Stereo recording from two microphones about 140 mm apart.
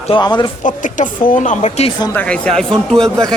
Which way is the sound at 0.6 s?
65° left (ahead or behind).